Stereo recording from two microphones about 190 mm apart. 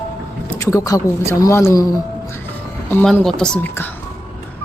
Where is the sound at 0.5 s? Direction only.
15° left (ahead or behind).